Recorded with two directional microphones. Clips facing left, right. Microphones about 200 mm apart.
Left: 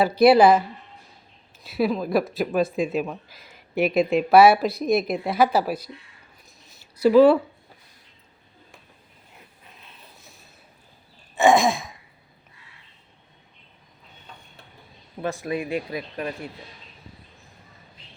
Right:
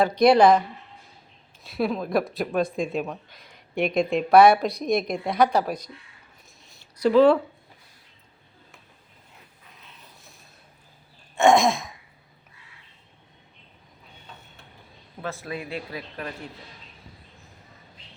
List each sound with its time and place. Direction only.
0.0 s speech: 5° left (ahead or behind)
1.6 s speech: 5° left (ahead or behind)
6.7 s a sound: 5° left (ahead or behind)
11.3 s speech: centre (ahead or behind)
15.2 s speech: 15° left (ahead or behind)